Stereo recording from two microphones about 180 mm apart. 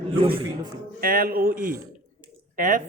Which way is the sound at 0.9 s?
55° right (ahead or behind).